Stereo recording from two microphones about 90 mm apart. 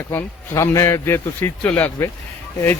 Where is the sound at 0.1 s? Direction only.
35° left (ahead or behind).